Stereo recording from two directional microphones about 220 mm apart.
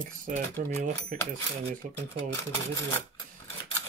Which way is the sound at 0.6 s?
35° right (ahead or behind).